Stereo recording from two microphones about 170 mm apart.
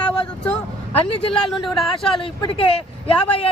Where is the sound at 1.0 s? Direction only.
35° left (ahead or behind).